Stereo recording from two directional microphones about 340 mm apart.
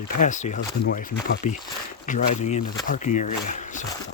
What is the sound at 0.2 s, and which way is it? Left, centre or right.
Speech, left.